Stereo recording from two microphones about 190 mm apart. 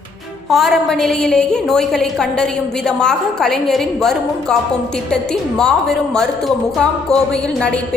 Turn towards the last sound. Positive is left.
turn(degrees=5)  # may be behind; listen again after turning